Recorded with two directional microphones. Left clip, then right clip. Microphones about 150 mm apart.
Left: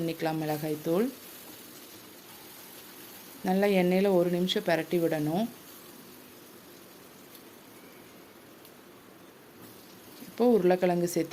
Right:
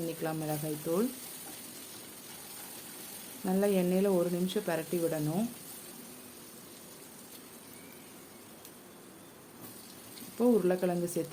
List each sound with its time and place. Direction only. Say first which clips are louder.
0.1 s a woman's voice: left 5 dB; 30° left (ahead or behind)
3.4 s a woman's voice: left 4 dB; 30° left (ahead or behind)
10.3 s a woman's voice: left 4 dB; 25° left (ahead or behind)